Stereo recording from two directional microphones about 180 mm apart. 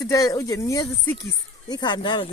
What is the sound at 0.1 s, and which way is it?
Speech, 20° left (ahead or behind).